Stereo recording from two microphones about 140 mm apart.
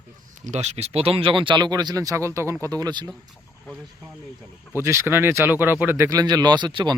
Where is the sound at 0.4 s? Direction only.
55° right (ahead or behind); by 3.1 s 30° right (ahead or behind).